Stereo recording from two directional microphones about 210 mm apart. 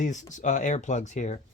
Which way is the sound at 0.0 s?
35° left (ahead or behind).